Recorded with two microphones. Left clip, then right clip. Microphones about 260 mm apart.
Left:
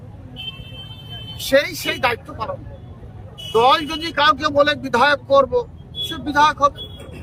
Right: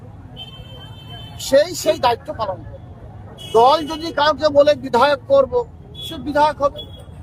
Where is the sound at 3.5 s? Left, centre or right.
Left.